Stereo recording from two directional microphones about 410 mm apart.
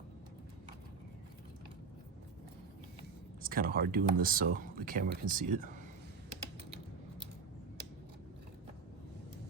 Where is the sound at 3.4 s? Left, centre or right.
Right.